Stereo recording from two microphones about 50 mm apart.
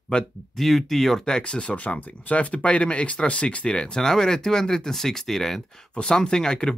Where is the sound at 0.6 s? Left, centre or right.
Centre.